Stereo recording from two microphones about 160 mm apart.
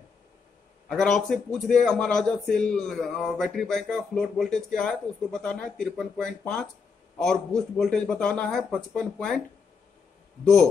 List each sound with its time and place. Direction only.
0.8 s a man's voice: 5° left (ahead or behind)
10.4 s a man's voice: 5° left (ahead or behind)